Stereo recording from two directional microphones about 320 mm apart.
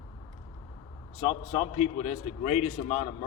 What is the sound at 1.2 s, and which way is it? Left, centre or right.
Speech, centre.